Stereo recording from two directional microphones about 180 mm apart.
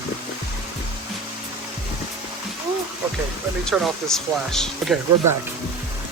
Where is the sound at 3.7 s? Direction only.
Centre (ahead or behind).